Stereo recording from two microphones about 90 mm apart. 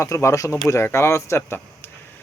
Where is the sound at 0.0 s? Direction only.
35° left (ahead or behind).